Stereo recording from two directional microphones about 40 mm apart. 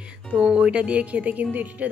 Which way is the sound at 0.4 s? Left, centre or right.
Right.